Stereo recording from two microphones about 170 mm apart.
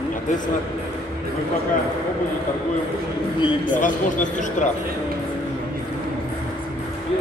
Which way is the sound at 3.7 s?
50° left (ahead or behind).